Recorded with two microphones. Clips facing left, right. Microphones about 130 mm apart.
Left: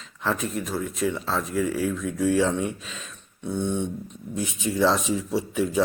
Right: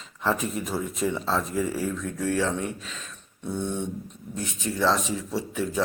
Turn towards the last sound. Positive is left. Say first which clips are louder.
# left 4 dB
turn(degrees=15)  # may be behind; listen again after turning